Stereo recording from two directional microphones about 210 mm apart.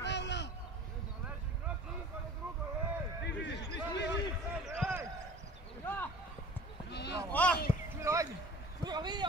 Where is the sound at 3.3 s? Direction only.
55° left (ahead or behind).